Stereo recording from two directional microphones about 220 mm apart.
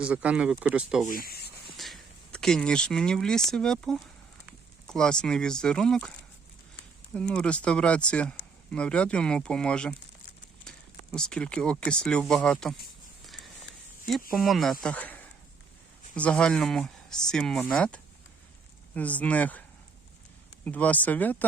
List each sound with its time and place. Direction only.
0.0 s speech: 5° right (ahead or behind)
1.1 s speech: 45° left (ahead or behind)
1.7 s a sound: centre (ahead or behind)
3.5 s speech: centre (ahead or behind)
7.1 s speech: 5° left (ahead or behind)
11.1 s speech: 5° left (ahead or behind)
13.2 s a sound: centre (ahead or behind)
14.1 s speech: centre (ahead or behind)
20.7 s speech: 5° left (ahead or behind)